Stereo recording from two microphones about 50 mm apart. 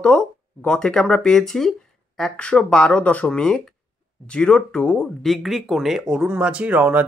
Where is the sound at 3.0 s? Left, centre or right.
Left.